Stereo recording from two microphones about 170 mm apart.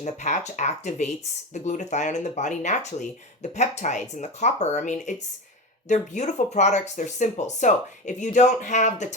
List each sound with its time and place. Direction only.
0.0 s speech: 45° left (ahead or behind)